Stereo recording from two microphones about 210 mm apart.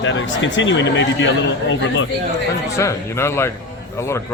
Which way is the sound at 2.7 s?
15° left (ahead or behind).